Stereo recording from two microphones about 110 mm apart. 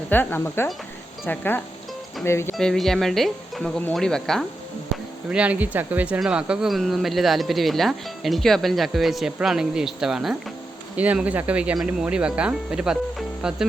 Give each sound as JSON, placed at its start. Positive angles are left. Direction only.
{"t": 0.1, "sound": "speech", "side_deg": 15}
{"t": 2.6, "sound": "speech", "side_deg": 5}
{"t": 5.3, "sound": "speech", "side_deg": -10}